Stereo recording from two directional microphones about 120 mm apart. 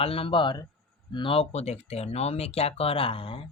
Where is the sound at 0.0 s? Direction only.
50° left (ahead or behind).